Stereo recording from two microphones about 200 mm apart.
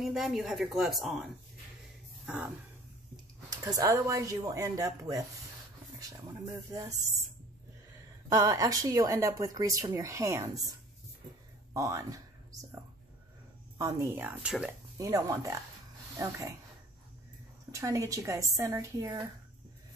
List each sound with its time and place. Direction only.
0.0 s a woman's voice: centre (ahead or behind)
3.4 s speech: 20° right (ahead or behind)
8.3 s speech: 15° right (ahead or behind)
11.7 s speech: 15° right (ahead or behind)
13.7 s speech: 15° right (ahead or behind)
15.0 s speech: 15° right (ahead or behind)
17.6 s speech: 15° right (ahead or behind)